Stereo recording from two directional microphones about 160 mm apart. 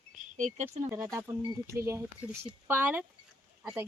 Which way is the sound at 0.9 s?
15° right (ahead or behind).